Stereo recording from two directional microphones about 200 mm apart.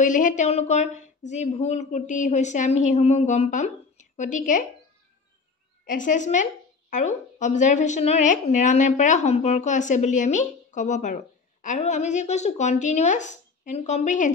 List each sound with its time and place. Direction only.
0.0 s speech: 40° left (ahead or behind)
5.9 s speech: 40° left (ahead or behind)